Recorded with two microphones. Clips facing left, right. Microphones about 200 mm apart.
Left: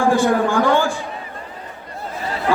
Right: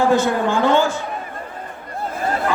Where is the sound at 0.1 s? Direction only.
20° right (ahead or behind).